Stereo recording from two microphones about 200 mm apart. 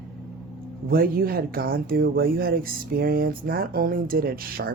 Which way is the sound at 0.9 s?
50° right (ahead or behind).